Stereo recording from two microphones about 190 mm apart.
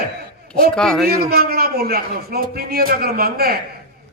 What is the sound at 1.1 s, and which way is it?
A man's voice, 55° right (ahead or behind).